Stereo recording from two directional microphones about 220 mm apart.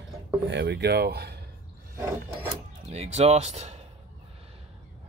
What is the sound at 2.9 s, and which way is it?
Speech, 30° right (ahead or behind).